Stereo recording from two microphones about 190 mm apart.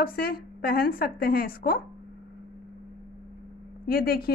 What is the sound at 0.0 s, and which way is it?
A woman's voice, 50° left (ahead or behind).